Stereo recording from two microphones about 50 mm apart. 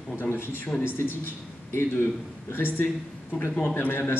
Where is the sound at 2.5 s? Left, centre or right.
Left.